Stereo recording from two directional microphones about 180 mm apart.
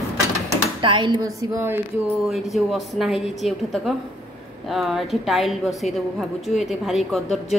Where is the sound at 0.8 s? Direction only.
25° right (ahead or behind).